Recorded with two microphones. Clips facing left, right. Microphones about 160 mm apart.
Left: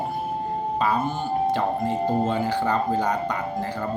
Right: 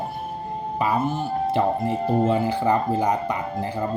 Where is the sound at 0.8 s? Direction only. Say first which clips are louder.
Right 2 dB; 5° right (ahead or behind).